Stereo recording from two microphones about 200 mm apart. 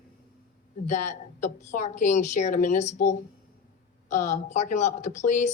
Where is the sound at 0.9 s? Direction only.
35° left (ahead or behind).